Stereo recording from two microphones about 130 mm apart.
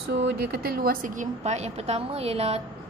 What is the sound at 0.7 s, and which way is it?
A woman's voice, 85° right.